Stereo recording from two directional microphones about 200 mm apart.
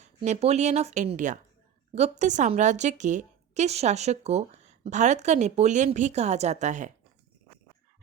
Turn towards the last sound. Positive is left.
turn(degrees=-35)  # may be behind; listen again after turning